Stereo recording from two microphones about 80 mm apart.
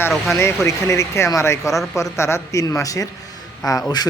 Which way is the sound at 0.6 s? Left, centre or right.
Left.